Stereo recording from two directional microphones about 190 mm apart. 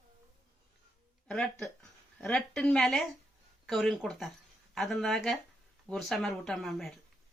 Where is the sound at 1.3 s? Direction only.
5° left (ahead or behind).